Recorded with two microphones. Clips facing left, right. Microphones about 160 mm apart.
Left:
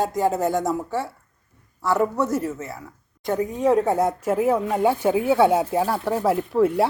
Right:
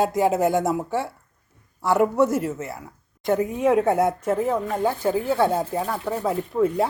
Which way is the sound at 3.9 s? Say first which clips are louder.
Right 1 dB; centre (ahead or behind).